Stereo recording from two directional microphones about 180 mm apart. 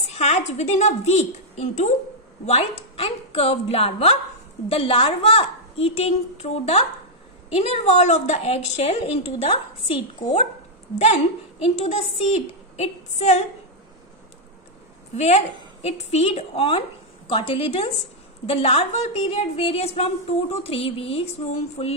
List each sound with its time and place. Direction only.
0.1 s a woman's voice: 35° left (ahead or behind)
11.6 s a woman's voice: 35° left (ahead or behind)
15.1 s a woman's voice: 35° left (ahead or behind)